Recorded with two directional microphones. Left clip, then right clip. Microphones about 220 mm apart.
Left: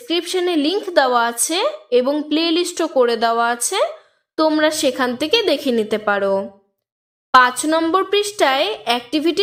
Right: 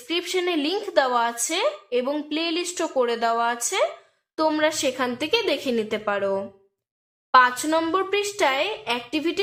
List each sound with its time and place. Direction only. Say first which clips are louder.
0.1 s a woman's voice: left 5 dB; 30° left (ahead or behind)